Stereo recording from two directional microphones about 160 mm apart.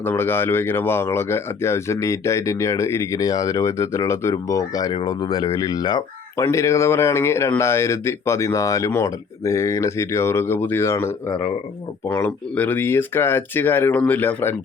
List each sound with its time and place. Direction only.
0.0 s speech: 15° left (ahead or behind)